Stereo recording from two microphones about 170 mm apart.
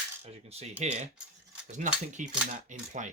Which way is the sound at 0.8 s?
40° right (ahead or behind).